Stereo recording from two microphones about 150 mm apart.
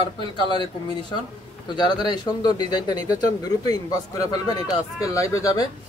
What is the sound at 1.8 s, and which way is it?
Speech, 30° left (ahead or behind).